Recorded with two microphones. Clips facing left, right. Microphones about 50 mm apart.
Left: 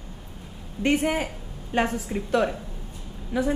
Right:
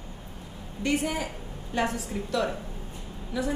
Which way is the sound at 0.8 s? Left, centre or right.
Left.